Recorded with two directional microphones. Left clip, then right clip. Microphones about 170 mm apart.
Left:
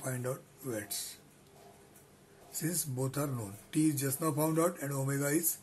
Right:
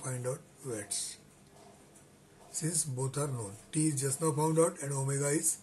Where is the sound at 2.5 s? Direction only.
25° left (ahead or behind).